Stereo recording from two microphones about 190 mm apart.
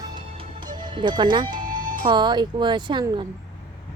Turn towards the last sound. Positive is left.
turn(degrees=-25)  # may be behind; listen again after turning